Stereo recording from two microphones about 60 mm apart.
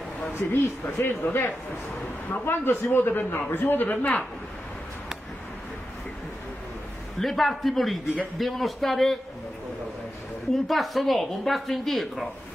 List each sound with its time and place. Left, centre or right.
0.4 s a man's voice: left
7.2 s a man's voice: centre
10.7 s a man's voice: centre